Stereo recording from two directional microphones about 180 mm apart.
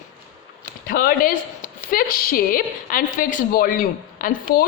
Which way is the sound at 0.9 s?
55° left (ahead or behind).